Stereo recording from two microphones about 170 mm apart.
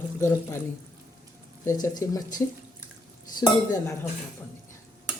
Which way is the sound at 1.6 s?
20° left (ahead or behind).